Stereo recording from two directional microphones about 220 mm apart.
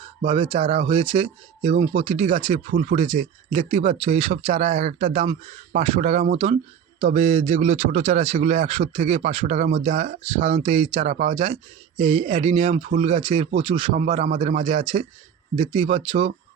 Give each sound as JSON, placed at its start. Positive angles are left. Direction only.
{"t": 0.3, "sound": "speech", "side_deg": -20}